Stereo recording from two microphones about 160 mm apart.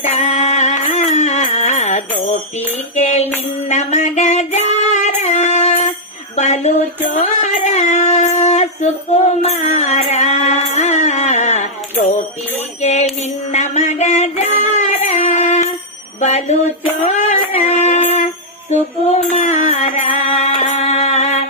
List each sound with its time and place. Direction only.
0.1 s music: 45° left (ahead or behind)
3.7 s female singing: 45° left (ahead or behind)
6.3 s a sound: 45° left (ahead or behind)
12.8 s music: 45° left (ahead or behind)
13.5 s a sound: 45° left (ahead or behind)
16.2 s music: 45° left (ahead or behind)
19.3 s music: 50° left (ahead or behind)